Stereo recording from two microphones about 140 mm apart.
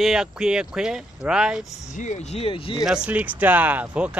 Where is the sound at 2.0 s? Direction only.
60° left (ahead or behind).